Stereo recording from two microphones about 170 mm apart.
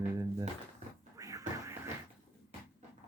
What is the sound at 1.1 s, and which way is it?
Music, 20° right (ahead or behind).